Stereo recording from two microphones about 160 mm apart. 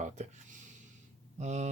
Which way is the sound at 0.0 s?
50° right (ahead or behind).